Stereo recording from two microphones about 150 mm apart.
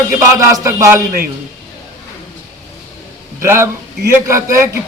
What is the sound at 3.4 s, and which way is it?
A man's voice, 15° right (ahead or behind).